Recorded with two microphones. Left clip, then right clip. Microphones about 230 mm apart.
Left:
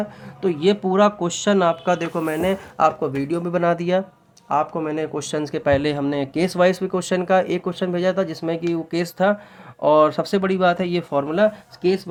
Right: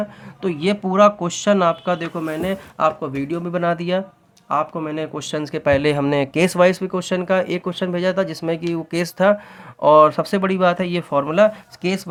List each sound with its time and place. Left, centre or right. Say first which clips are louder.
0.4 s speech: left 2 dB; centre
6.6 s speech: right 1 dB; centre; by 12.0 s right